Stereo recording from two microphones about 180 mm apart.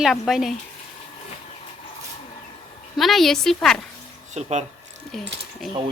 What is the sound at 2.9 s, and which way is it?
Speech, centre (ahead or behind).